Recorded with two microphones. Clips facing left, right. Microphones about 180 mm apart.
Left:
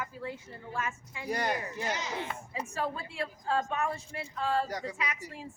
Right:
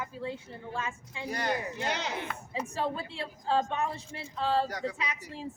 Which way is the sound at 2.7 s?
30° right (ahead or behind).